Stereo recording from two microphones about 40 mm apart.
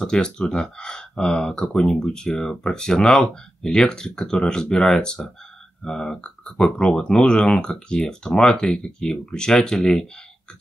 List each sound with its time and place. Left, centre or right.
0.0 s speech: centre